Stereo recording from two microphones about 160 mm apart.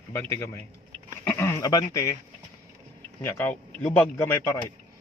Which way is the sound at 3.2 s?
15° left (ahead or behind).